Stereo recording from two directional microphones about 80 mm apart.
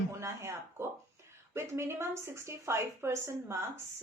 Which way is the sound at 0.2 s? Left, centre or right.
Right.